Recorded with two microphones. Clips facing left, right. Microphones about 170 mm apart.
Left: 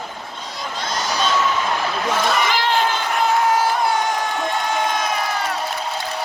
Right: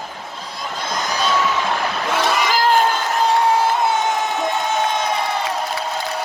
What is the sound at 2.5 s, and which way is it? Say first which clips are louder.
Crowd: right 3 dB; 45° right (ahead or behind).